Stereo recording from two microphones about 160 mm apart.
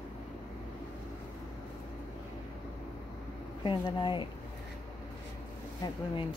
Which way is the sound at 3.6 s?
30° left (ahead or behind).